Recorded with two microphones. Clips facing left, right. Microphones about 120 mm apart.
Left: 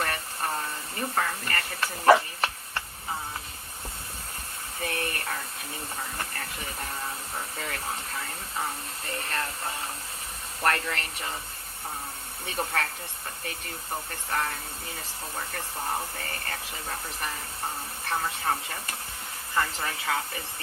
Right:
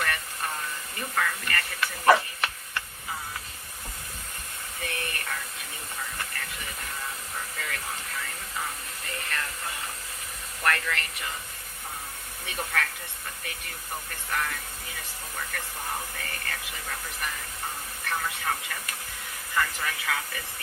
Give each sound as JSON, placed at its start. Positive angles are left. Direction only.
{"t": 0.0, "sound": "hiss", "side_deg": 35}
{"t": 4.8, "sound": "a sound", "side_deg": 35}
{"t": 6.0, "sound": "music", "side_deg": 35}
{"t": 10.6, "sound": "speech", "side_deg": 35}
{"t": 12.5, "sound": "speech", "side_deg": 30}
{"t": 14.3, "sound": "speech", "side_deg": 30}